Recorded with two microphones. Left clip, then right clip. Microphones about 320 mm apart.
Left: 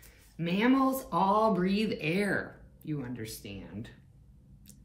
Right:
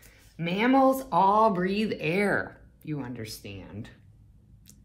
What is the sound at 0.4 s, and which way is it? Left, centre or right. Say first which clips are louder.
Speech: right 5 dB; centre.